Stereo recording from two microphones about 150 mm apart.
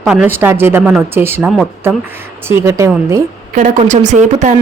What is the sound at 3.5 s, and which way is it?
A woman's voice, 55° right (ahead or behind).